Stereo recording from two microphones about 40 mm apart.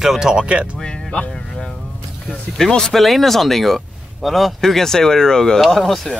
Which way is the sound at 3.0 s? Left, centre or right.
Centre.